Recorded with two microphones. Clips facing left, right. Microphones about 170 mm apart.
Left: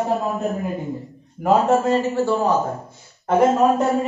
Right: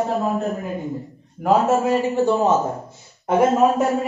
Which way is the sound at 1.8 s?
15° right (ahead or behind).